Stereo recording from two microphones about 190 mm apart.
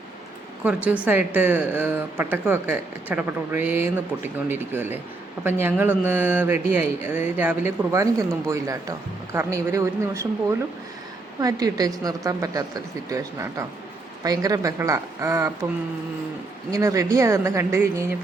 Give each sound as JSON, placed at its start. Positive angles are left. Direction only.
{"t": 0.6, "sound": "speech", "side_deg": -5}
{"t": 11.3, "sound": "speech", "side_deg": -20}
{"t": 16.7, "sound": "speech", "side_deg": -15}